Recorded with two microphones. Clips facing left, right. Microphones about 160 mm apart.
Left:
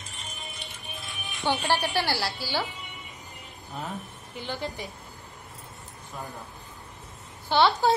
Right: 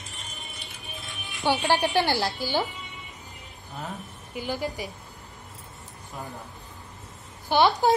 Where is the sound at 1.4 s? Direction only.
10° right (ahead or behind).